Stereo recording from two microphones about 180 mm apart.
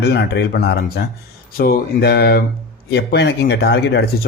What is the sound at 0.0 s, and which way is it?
Speech, 65° left (ahead or behind).